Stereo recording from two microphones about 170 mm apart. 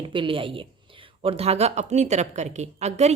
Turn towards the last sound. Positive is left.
turn(degrees=-40)  # may be behind; listen again after turning